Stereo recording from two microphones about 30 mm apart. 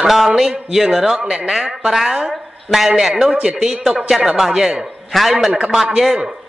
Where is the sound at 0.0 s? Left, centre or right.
Centre.